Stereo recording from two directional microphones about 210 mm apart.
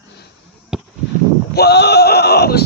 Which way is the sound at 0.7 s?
5° right (ahead or behind).